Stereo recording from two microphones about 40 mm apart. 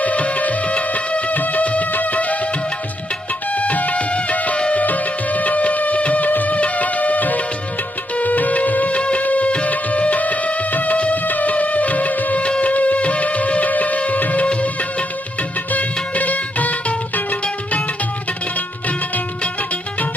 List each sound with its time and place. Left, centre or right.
0.0 s music: left
3.5 s music: left
9.0 s music: left
12.4 s music: left
14.4 s music of bollywood: left
15.7 s music: left